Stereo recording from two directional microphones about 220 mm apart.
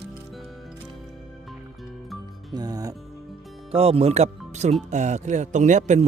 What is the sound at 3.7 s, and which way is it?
A man's voice, 25° right (ahead or behind).